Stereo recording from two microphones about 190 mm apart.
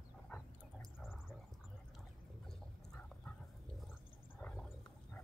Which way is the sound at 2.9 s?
5° left (ahead or behind).